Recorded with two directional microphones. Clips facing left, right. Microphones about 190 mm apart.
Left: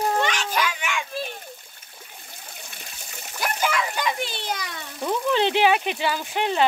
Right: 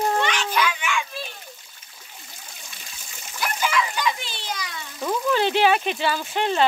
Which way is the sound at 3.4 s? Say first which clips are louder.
Right 1 dB; 45° left (ahead or behind).